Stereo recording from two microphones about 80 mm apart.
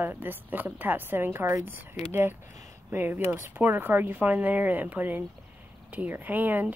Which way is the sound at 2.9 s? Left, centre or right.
Right.